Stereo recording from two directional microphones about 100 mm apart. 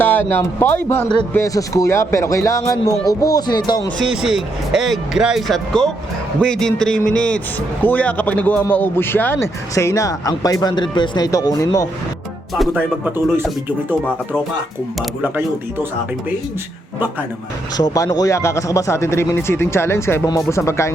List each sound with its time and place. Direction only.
0.0 s speech: 20° left (ahead or behind)
1.5 s speech: 35° left (ahead or behind)
4.0 s a man's voice: 5° right (ahead or behind); by 11.3 s 50° left (ahead or behind)
11.3 s speech: 35° left (ahead or behind)
12.7 s speech: 20° right (ahead or behind)
15.2 s speech: 20° right (ahead or behind)
17.7 s speech: 40° left (ahead or behind)